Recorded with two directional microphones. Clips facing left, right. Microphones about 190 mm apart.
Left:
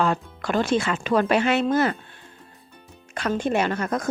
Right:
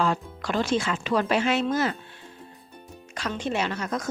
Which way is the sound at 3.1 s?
55° left (ahead or behind).